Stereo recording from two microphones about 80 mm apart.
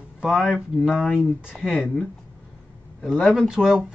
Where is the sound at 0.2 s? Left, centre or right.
Centre.